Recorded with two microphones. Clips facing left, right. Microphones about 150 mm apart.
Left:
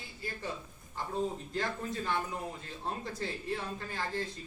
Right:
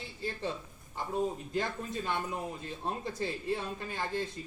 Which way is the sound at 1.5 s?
20° right (ahead or behind).